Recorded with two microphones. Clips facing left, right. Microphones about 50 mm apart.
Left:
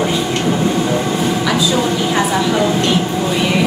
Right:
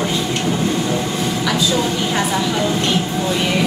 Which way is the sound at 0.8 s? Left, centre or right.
Centre.